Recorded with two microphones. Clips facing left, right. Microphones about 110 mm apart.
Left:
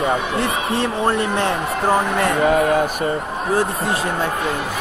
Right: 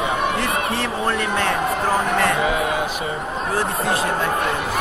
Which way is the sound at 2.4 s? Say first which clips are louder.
Left 5 dB; 50° left (ahead or behind).